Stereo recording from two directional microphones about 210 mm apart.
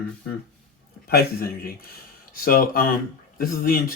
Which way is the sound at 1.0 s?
45° left (ahead or behind).